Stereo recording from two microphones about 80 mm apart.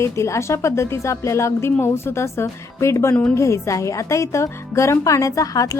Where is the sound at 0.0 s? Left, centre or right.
Left.